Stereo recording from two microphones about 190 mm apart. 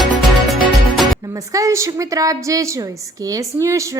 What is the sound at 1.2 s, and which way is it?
A woman's voice, 15° right (ahead or behind).